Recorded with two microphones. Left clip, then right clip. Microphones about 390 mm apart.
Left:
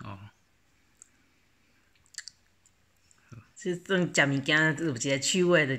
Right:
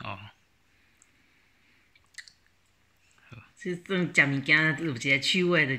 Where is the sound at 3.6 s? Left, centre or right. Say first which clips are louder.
Left 2 dB; left.